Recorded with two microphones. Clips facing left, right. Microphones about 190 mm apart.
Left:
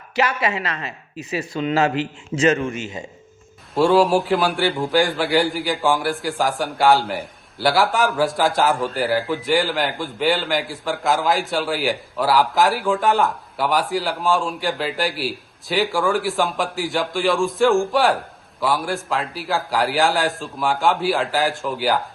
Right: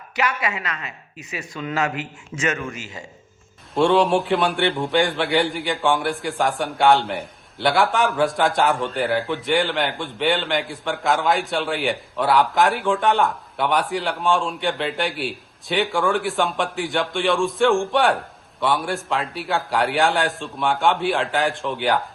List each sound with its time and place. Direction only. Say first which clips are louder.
0.2 s speech: left 3 dB; 35° left (ahead or behind)
3.8 s a man's voice: left 2 dB; centre (ahead or behind)